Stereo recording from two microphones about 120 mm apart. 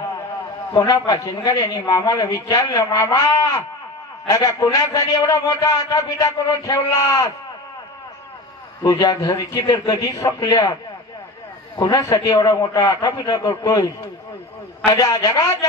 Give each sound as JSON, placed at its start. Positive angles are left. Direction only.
{"t": 0.7, "sound": "a man's voice", "side_deg": 30}
{"t": 8.8, "sound": "a man's voice", "side_deg": 30}